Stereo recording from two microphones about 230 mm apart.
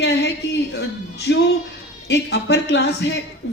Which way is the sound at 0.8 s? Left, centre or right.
Left.